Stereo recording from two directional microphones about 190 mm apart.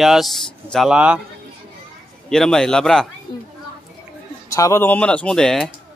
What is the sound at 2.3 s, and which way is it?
Speech, 5° left (ahead or behind).